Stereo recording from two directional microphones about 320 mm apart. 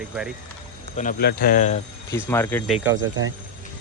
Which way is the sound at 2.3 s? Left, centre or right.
Centre.